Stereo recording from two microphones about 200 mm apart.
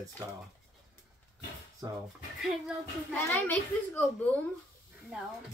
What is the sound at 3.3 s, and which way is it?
A woman's voice, 10° left (ahead or behind).